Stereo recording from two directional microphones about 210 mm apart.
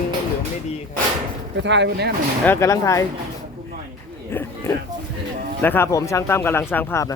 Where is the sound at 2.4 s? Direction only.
10° left (ahead or behind).